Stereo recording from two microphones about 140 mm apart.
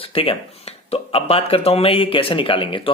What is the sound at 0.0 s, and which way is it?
Speech, 40° left (ahead or behind).